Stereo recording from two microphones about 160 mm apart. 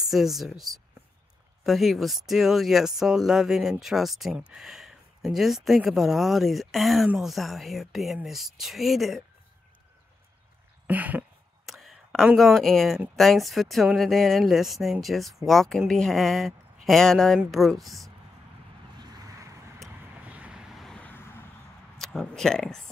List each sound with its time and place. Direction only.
0.0 s speech: centre (ahead or behind)
10.9 s a sound: 10° right (ahead or behind)
11.7 s speech: centre (ahead or behind)
18.9 s vehicle: 25° right (ahead or behind)
20.2 s vehicle: 10° right (ahead or behind); by 21.4 s 15° left (ahead or behind)
21.9 s speech: centre (ahead or behind)